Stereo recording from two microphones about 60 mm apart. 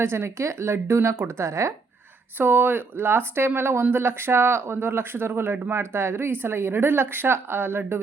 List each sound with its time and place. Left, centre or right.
0.0 s a woman's voice: right
1.5 s speech: right
2.4 s speech: right